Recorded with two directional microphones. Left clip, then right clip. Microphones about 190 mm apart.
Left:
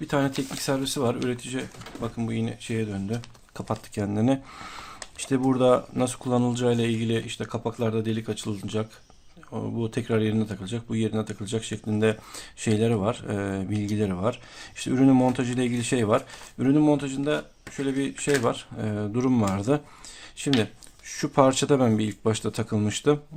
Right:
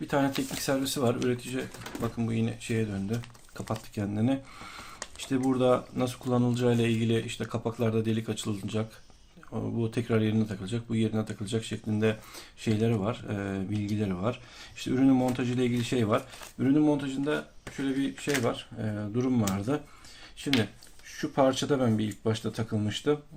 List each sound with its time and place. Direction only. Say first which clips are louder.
0.1 s speech: left 2 dB; 25° left (ahead or behind)
21.1 s speech: left 5 dB; 40° left (ahead or behind)